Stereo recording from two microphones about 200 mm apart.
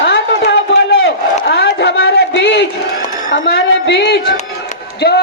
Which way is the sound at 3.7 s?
65° left (ahead or behind).